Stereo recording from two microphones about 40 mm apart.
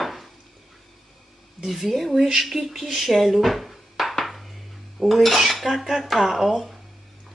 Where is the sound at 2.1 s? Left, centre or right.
Centre.